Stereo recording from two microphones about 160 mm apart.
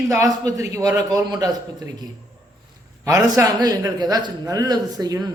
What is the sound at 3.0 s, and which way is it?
A man's voice, 20° right (ahead or behind).